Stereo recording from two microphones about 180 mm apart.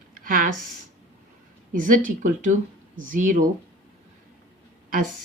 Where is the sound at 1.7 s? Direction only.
50° right (ahead or behind).